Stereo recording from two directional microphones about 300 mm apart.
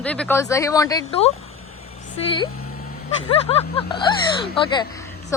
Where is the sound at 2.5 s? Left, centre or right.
Left.